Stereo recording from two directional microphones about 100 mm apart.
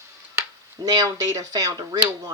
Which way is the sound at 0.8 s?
35° right (ahead or behind).